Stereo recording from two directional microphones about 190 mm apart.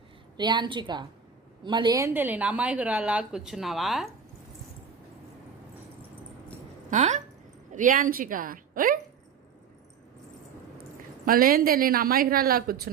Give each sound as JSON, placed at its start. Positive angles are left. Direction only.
{"t": 0.3, "sound": "a woman's voice", "side_deg": -25}
{"t": 6.9, "sound": "speech", "side_deg": -40}
{"t": 11.3, "sound": "speech", "side_deg": -50}